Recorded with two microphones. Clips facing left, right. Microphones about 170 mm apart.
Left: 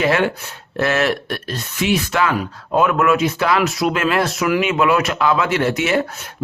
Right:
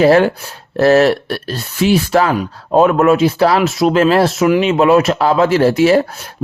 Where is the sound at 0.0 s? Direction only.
35° right (ahead or behind).